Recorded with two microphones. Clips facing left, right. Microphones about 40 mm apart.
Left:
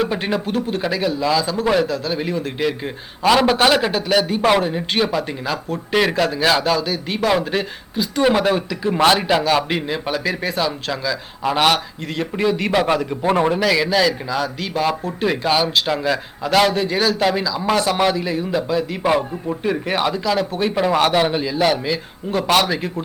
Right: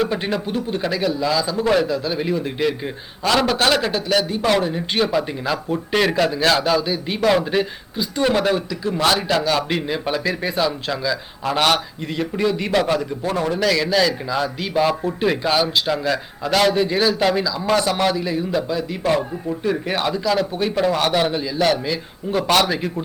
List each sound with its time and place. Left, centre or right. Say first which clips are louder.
0.0 s a man's voice: left 1 dB; centre
3.2 s a man's voice: left 3 dB; centre
6.7 s a man's voice: right 1 dB; centre
9.0 s a man's voice: left 3 dB; left; by 11.2 s centre
11.4 s a man's voice: left 2 dB; centre
13.2 s a man's voice: left 7 dB; left
13.6 s a man's voice: left 1 dB; centre
14.3 s a man's voice: right 1 dB; centre